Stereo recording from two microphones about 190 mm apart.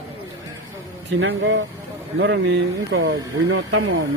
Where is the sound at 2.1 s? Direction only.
70° right (ahead or behind).